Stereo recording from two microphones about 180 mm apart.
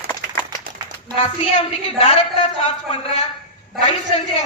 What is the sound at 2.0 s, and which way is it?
Speech, 30° left (ahead or behind).